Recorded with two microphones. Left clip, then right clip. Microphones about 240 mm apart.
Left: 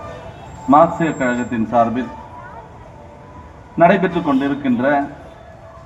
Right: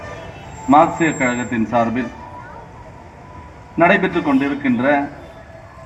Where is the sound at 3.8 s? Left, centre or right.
Left.